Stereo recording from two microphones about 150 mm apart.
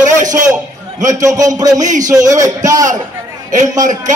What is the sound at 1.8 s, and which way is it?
Speech, 55° right (ahead or behind).